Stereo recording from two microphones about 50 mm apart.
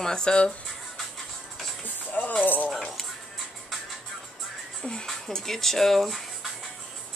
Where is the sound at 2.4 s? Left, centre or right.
Left.